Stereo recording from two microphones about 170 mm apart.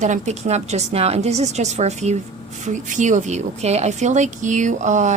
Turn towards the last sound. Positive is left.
turn(degrees=-45)  # may be behind; listen again after turning